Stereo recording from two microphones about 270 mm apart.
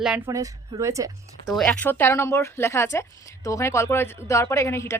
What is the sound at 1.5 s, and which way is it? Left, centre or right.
A woman's voice, centre.